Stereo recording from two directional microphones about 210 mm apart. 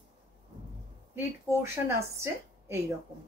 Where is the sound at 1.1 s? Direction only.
10° right (ahead or behind).